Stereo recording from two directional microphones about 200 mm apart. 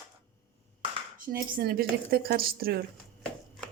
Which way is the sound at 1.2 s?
45° right (ahead or behind).